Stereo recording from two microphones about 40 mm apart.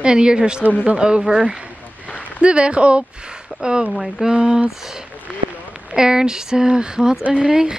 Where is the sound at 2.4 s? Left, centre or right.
Right.